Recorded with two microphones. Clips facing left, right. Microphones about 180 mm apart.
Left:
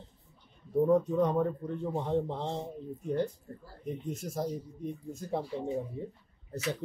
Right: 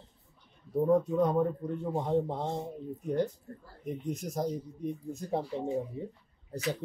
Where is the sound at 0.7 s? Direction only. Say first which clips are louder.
Even; 10° right (ahead or behind).